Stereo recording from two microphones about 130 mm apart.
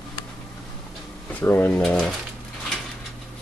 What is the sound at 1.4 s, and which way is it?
Speech, 15° left (ahead or behind).